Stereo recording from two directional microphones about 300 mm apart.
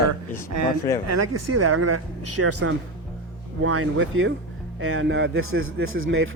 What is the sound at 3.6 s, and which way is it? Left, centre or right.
A man's voice, right.